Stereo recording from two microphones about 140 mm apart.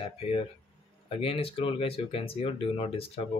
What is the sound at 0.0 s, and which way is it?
Speech, 45° left (ahead or behind).